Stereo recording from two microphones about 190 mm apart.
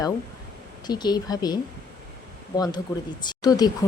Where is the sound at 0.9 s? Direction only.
20° left (ahead or behind).